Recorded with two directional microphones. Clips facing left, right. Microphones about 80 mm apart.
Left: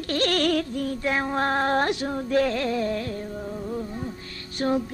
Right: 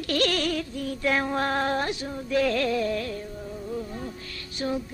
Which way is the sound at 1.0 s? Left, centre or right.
Left.